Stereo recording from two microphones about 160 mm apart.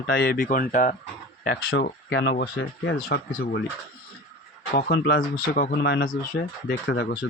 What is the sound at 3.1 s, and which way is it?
Speech, 75° left (ahead or behind).